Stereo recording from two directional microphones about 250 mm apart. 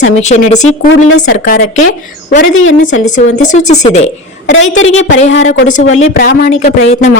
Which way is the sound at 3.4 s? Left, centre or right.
Left.